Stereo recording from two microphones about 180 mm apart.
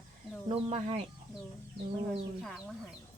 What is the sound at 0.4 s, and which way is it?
Speech, 30° right (ahead or behind).